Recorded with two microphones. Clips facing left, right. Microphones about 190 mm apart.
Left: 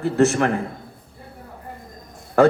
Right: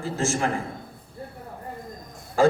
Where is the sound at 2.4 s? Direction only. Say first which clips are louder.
Left 4 dB; 65° left (ahead or behind).